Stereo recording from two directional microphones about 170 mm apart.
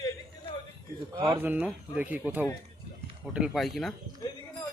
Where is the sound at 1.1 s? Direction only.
20° right (ahead or behind).